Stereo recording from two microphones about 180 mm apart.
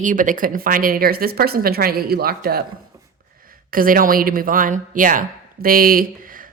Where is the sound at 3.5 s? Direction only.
50° right (ahead or behind).